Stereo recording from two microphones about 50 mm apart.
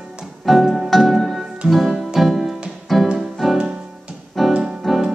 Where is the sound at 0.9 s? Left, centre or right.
Centre.